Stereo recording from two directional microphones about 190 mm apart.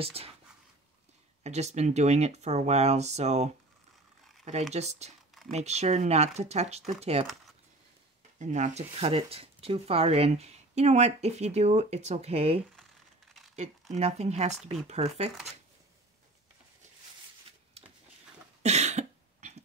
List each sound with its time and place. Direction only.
0.0 s speech: 30° right (ahead or behind)
1.4 s speech: 35° right (ahead or behind)
4.7 s speech: 35° right (ahead or behind)
8.4 s speech: 40° right (ahead or behind)
13.9 s speech: 35° right (ahead or behind)
17.8 s a sound: 30° right (ahead or behind)
18.6 s cough: 35° right (ahead or behind)